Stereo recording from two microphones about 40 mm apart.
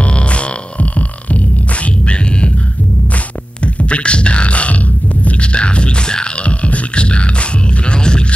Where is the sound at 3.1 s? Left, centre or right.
Left.